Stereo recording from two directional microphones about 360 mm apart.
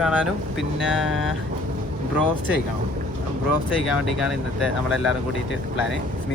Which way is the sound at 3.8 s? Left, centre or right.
Left.